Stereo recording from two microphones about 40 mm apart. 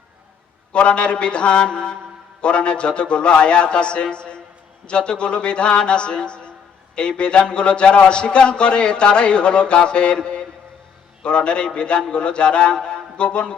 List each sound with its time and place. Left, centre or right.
0.7 s a man's voice: left